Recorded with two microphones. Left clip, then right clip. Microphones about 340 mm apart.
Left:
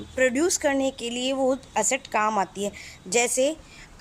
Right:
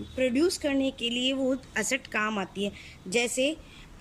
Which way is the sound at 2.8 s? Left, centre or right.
Centre.